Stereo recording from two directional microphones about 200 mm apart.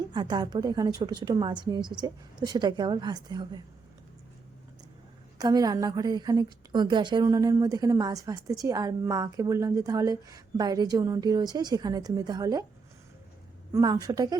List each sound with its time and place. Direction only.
0.1 s a woman's voice: 20° right (ahead or behind)
5.4 s a woman's voice: 20° right (ahead or behind)
13.7 s a woman's voice: 15° right (ahead or behind)